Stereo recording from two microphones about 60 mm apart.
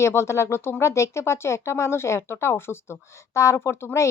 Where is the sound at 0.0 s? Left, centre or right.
Left.